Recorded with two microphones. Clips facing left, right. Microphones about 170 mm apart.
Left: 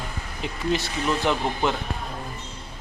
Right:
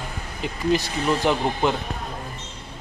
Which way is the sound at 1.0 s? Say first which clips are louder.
Right 1 dB; 5° right (ahead or behind).